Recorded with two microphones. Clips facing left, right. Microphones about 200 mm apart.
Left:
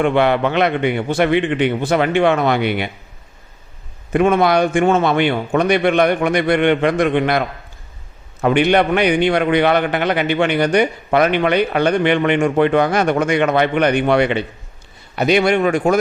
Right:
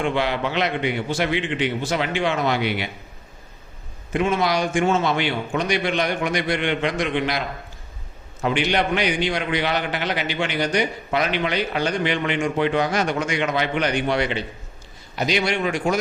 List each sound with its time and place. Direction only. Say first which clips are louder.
0.0 s a man's voice: left 8 dB; 60° left (ahead or behind)
4.1 s a man's voice: left 7 dB; 55° left (ahead or behind)